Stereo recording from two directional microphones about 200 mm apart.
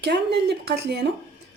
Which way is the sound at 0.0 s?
55° right (ahead or behind).